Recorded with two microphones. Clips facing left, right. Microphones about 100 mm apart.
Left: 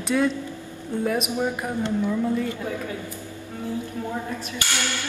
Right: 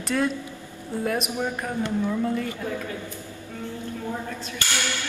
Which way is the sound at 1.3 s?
15° left (ahead or behind).